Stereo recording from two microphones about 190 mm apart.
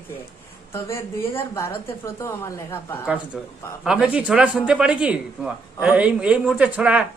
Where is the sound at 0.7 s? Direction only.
15° left (ahead or behind).